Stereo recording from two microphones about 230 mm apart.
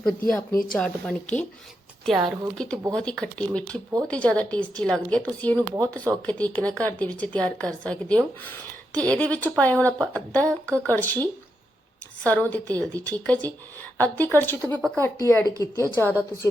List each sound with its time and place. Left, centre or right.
0.0 s speech: centre